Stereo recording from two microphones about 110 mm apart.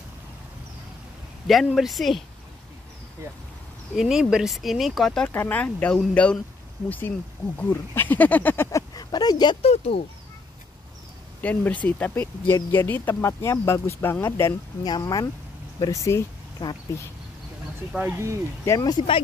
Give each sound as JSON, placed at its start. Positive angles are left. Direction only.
{"t": 1.5, "sound": "speech", "side_deg": 0}
{"t": 3.9, "sound": "speech", "side_deg": -5}
{"t": 5.3, "sound": "speech", "side_deg": 15}
{"t": 7.7, "sound": "speech", "side_deg": 20}
{"t": 8.7, "sound": "a sound", "side_deg": 35}
{"t": 9.6, "sound": "speech", "side_deg": 65}
{"t": 11.4, "sound": "speech", "side_deg": 15}
{"t": 14.9, "sound": "speech", "side_deg": 35}
{"t": 17.9, "sound": "speech", "side_deg": -20}
{"t": 18.7, "sound": "speech", "side_deg": 30}
{"t": 18.9, "sound": "speech", "side_deg": 55}